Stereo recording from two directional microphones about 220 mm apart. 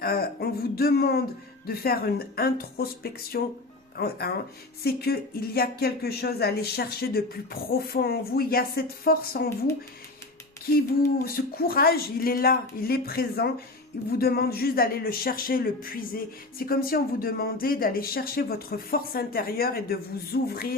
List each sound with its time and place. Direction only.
0.0 s speech: 45° left (ahead or behind)
10.7 s speech: 40° left (ahead or behind)